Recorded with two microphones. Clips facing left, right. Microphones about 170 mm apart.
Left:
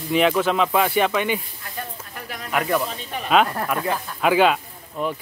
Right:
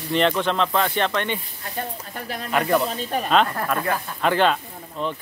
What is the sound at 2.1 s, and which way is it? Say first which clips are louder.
Speech: right 3 dB; 30° right (ahead or behind).